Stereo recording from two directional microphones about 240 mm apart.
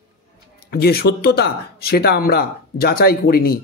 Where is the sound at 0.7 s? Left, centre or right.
Left.